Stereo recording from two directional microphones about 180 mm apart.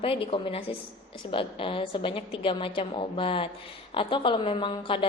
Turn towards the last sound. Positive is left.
turn(degrees=30)  # may be behind; listen again after turning